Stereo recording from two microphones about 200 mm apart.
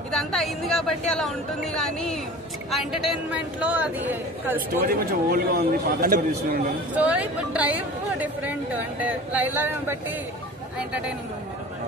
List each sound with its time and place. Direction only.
0.1 s a woman's voice: centre (ahead or behind)
4.8 s a man's voice: 45° right (ahead or behind)
7.0 s a woman's voice: 5° right (ahead or behind)